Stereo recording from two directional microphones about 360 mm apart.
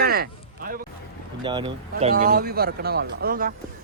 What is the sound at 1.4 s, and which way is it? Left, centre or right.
Speech, centre.